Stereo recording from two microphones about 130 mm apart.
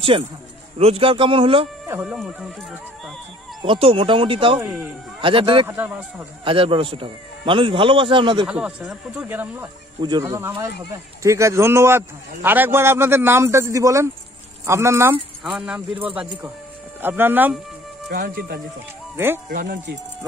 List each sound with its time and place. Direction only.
0.7 s speech: 50° right (ahead or behind)
1.9 s speech: 15° right (ahead or behind)
3.6 s speech: 45° right (ahead or behind)
4.6 s speech: 5° right (ahead or behind)
5.2 s speech: 40° right (ahead or behind)
5.7 s speech: 15° right (ahead or behind)
6.4 s speech: 40° right (ahead or behind)
8.5 s speech: 5° right (ahead or behind)
15.4 s speech: 5° right (ahead or behind)
19.1 s speech: 15° right (ahead or behind)